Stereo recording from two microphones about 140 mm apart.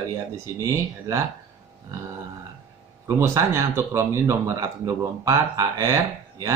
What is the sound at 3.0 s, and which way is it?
Speech, 20° right (ahead or behind).